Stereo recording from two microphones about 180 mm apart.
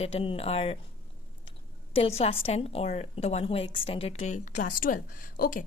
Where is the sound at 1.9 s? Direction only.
35° left (ahead or behind).